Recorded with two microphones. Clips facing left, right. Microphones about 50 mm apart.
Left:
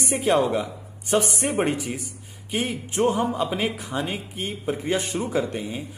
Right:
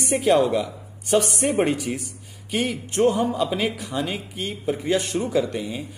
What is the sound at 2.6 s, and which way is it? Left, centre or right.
Speech, centre.